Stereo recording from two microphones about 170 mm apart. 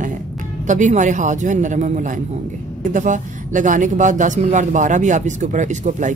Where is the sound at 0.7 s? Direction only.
45° right (ahead or behind).